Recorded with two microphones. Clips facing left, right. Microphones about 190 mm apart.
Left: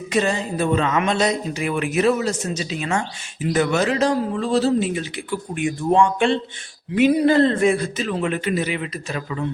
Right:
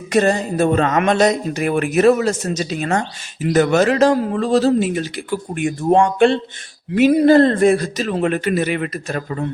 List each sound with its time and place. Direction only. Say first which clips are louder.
0.1 s speech: right 5 dB; 45° right (ahead or behind)